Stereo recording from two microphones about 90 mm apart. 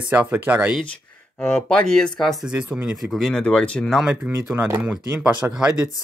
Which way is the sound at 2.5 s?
15° right (ahead or behind).